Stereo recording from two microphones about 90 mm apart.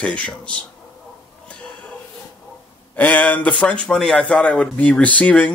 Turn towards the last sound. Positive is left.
turn(degrees=15)  # may be behind; listen again after turning